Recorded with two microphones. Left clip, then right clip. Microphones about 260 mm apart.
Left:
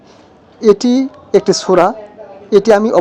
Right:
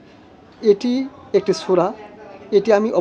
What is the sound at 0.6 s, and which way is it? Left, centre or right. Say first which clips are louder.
A man's voice: left 6 dB; left.